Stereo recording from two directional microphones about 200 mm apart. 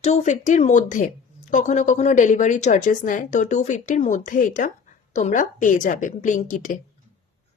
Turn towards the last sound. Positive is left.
turn(degrees=40)  # may be behind; listen again after turning